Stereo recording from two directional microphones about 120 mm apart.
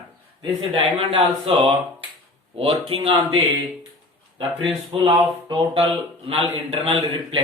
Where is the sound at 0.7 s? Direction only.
50° right (ahead or behind).